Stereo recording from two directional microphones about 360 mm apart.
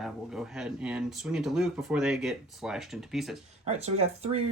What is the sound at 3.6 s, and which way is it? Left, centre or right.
Speech, centre.